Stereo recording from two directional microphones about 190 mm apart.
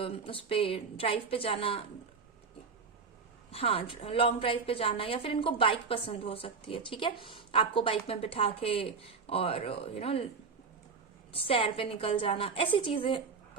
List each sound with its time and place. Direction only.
0.0 s a woman's voice: 30° left (ahead or behind)
3.5 s a woman's voice: 30° left (ahead or behind)
11.3 s a woman's voice: 30° left (ahead or behind)